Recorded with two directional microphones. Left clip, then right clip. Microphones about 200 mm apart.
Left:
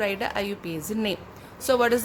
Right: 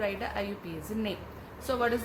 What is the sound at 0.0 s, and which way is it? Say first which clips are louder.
A woman's voice: left 6 dB; 55° left (ahead or behind).